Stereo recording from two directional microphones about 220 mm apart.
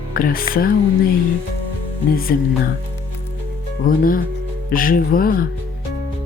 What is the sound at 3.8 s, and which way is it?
Speech, 40° left (ahead or behind).